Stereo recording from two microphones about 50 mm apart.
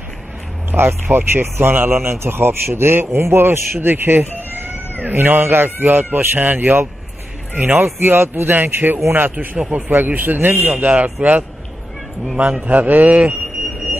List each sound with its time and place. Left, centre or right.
0.7 s speech: right
3.9 s cat: right
5.0 s speech: right
8.2 s speech: right
8.5 s speech: right
12.6 s speech: right